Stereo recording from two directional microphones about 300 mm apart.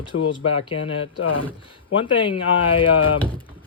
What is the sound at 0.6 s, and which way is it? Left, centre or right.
Speech, centre.